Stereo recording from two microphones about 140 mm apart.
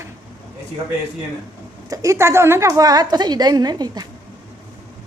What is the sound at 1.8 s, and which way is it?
A woman's voice, 20° right (ahead or behind).